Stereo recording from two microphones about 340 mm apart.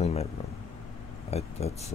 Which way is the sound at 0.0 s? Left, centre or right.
Centre.